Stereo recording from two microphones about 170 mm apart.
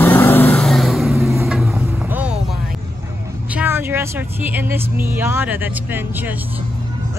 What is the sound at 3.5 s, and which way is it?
Speech, 10° right (ahead or behind).